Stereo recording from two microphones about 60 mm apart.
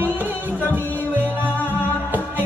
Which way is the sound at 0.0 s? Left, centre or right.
Right.